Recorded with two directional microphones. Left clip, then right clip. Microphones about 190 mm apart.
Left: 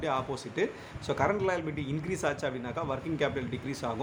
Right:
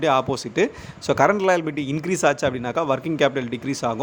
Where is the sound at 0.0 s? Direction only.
50° right (ahead or behind).